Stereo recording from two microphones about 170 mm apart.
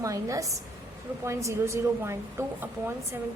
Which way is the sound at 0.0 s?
20° right (ahead or behind).